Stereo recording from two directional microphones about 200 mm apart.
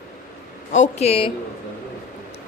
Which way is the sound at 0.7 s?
35° left (ahead or behind).